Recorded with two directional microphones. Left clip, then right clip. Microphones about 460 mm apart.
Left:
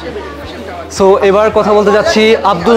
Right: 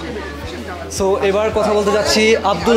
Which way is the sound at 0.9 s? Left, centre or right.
Centre.